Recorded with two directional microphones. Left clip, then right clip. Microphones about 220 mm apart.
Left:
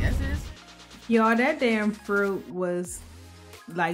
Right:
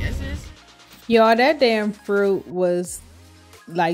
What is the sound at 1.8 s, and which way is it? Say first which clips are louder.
Speech: right 2 dB; centre (ahead or behind).